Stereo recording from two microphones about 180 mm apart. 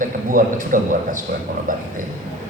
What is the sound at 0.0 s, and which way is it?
A man's voice, 50° right (ahead or behind).